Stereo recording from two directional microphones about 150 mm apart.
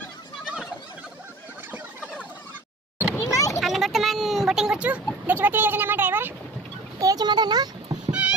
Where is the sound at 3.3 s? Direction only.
20° left (ahead or behind).